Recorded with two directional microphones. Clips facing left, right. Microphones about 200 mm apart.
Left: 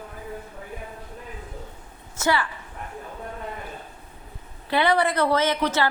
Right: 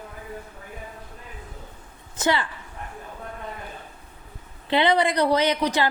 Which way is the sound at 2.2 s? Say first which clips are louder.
Even; 20° right (ahead or behind).